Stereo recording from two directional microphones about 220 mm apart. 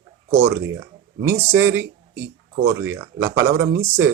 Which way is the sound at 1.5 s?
10° right (ahead or behind).